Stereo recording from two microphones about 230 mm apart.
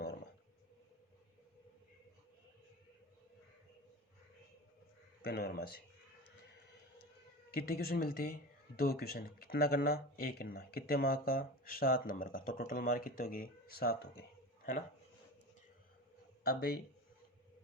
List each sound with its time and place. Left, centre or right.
5.2 s speech: left
7.5 s speech: left
16.4 s speech: left